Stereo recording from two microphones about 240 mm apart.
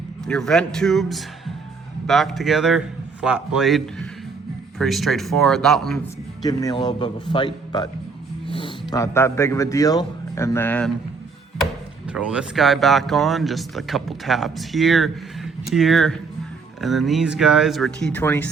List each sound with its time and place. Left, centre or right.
0.3 s speech: centre
6.4 s a man's voice: centre
11.6 s speech: centre